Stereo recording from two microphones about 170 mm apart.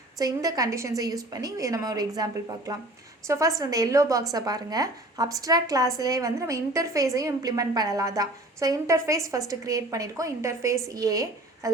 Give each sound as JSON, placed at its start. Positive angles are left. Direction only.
{"t": 0.2, "sound": "a woman's voice", "side_deg": -20}